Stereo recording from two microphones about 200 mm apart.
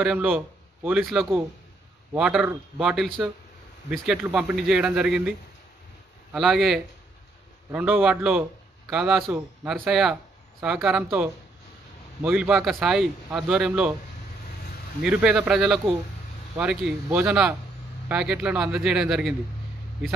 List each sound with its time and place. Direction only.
0.0 s a man's voice: 5° right (ahead or behind)
6.3 s a man's voice: centre (ahead or behind)
15.0 s a man's voice: 5° right (ahead or behind)